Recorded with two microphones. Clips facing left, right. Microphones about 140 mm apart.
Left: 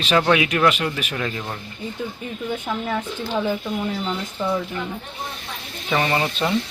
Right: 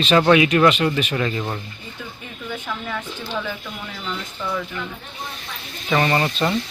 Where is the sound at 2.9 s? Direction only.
30° left (ahead or behind).